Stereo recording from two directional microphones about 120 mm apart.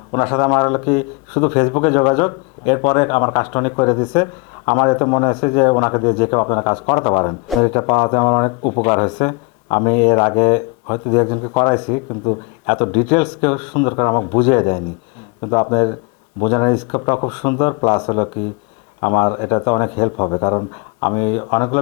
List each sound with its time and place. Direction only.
0.1 s speech: 25° left (ahead or behind)